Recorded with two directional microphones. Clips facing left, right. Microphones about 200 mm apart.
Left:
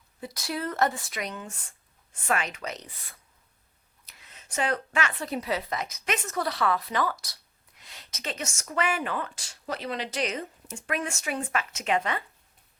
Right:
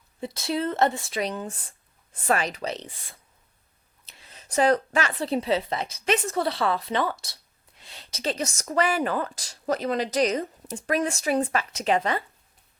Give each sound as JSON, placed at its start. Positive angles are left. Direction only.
{"t": 0.2, "sound": "a woman's voice", "side_deg": -25}